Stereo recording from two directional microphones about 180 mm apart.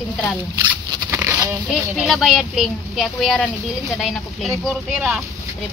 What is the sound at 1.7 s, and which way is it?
Speech, centre (ahead or behind).